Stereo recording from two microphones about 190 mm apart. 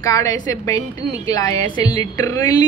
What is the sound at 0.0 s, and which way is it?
A woman's voice, 15° left (ahead or behind).